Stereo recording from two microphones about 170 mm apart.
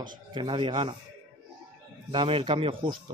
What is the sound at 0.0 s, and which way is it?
Speech, 25° right (ahead or behind).